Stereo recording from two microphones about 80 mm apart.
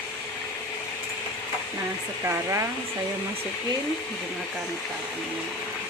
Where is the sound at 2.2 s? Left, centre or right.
Right.